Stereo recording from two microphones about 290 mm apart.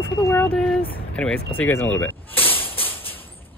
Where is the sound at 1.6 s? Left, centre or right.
Centre.